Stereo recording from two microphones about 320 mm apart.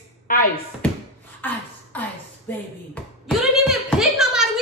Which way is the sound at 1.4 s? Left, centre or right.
Centre.